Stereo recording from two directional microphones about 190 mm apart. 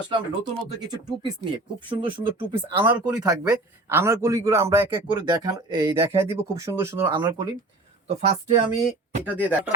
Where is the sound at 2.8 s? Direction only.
10° right (ahead or behind).